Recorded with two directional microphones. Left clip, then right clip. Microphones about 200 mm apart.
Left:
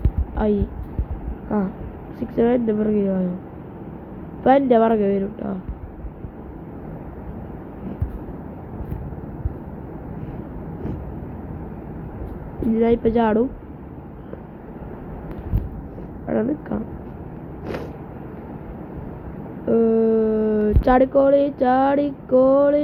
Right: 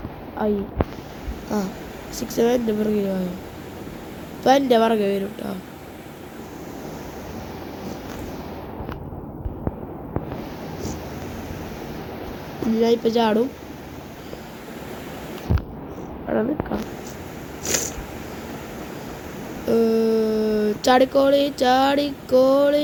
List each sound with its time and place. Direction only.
0.4 s speech: 15° left (ahead or behind)
1.5 s speech: centre (ahead or behind)
4.4 s speech: 5° right (ahead or behind)
12.8 s speech: 5° right (ahead or behind)
16.2 s a sound: 5° left (ahead or behind)
17.7 s a sound: 10° right (ahead or behind)
19.6 s speech: 5° right (ahead or behind)